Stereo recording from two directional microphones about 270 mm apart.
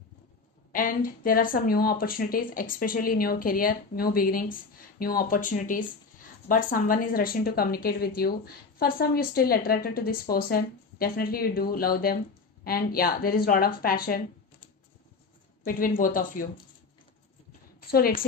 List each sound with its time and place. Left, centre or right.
0.7 s a woman's voice: left
15.6 s a woman's voice: left
17.7 s a woman's voice: left